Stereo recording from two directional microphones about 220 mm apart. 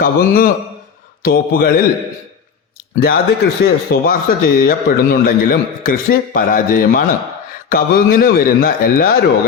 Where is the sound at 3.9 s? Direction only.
50° left (ahead or behind).